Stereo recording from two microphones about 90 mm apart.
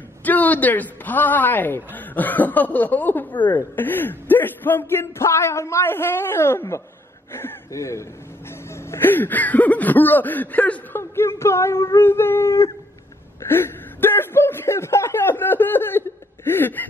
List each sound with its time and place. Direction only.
0.2 s a man's voice: 20° left (ahead or behind); by 8.0 s 35° left (ahead or behind)
8.9 s a man's voice: 20° left (ahead or behind)